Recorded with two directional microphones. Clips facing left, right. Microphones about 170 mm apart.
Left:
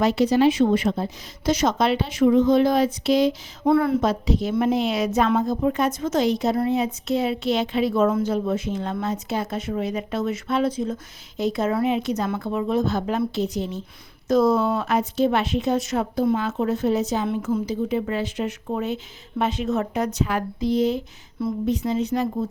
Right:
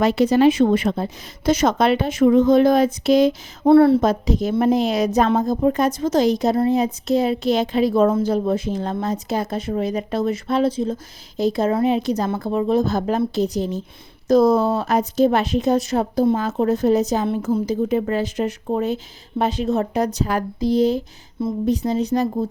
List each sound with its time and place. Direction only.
0.0 s a woman's voice: 55° right (ahead or behind)
3.6 s a woman's voice: 30° right (ahead or behind)